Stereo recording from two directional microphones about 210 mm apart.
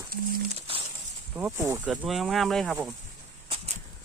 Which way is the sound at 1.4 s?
10° right (ahead or behind).